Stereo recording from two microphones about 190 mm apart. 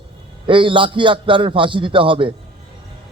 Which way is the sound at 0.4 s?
25° right (ahead or behind).